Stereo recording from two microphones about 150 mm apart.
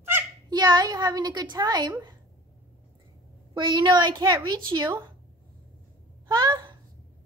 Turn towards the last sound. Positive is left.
turn(degrees=-25)  # may be behind; listen again after turning